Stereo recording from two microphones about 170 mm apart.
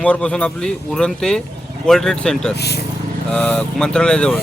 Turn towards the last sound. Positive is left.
turn(degrees=5)  # may be behind; listen again after turning